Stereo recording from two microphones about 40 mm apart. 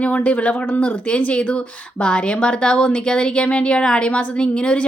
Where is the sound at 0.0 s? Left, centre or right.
Left.